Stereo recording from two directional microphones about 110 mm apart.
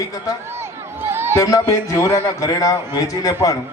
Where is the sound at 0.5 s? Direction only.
20° right (ahead or behind).